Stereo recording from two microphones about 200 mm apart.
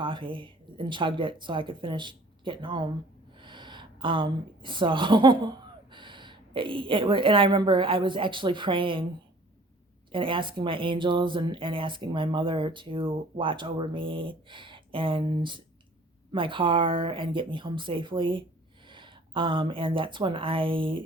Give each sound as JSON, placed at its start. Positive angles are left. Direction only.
{"t": 0.0, "sound": "speech", "side_deg": -25}
{"t": 10.1, "sound": "speech", "side_deg": -25}